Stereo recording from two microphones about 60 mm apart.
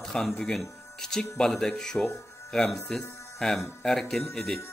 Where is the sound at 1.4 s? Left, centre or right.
Centre.